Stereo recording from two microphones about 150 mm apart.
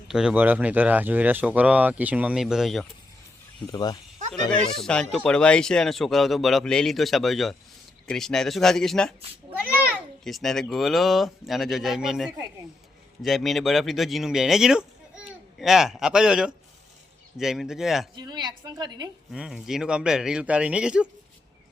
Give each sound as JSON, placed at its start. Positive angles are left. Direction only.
{"t": 0.1, "sound": "speech", "side_deg": -5}
{"t": 3.7, "sound": "speech", "side_deg": 25}
{"t": 4.4, "sound": "speech", "side_deg": 5}
{"t": 9.5, "sound": "a sound", "side_deg": -10}
{"t": 10.2, "sound": "speech", "side_deg": 0}
{"t": 18.2, "sound": "a woman's voice", "side_deg": -30}
{"t": 19.3, "sound": "speech", "side_deg": -5}